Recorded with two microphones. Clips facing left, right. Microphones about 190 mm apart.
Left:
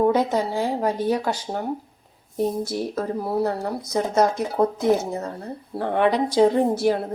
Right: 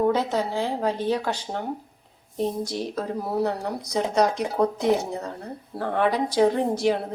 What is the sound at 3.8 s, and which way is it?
Speech, 15° right (ahead or behind).